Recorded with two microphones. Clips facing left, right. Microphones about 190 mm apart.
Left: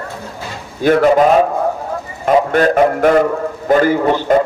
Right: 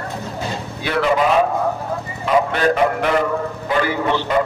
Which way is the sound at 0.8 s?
45° left (ahead or behind).